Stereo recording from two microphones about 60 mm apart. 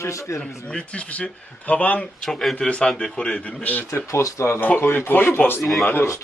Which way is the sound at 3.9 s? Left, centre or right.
Left.